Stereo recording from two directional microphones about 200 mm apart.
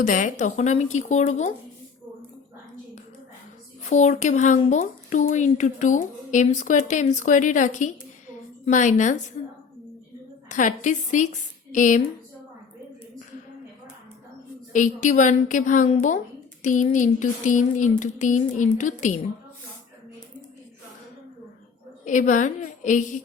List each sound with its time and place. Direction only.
0.0 s speech: 40° left (ahead or behind)
3.8 s speech: 35° left (ahead or behind)
10.5 s speech: 40° left (ahead or behind)
14.7 s speech: 40° left (ahead or behind)
22.0 s speech: 40° left (ahead or behind)